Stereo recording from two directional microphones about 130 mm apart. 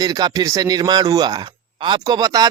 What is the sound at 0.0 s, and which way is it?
Speech, 30° right (ahead or behind).